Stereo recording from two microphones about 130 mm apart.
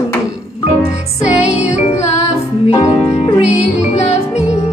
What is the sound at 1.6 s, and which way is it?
Music, 55° left (ahead or behind).